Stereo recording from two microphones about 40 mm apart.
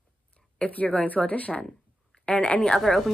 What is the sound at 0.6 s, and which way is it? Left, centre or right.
Speech, left.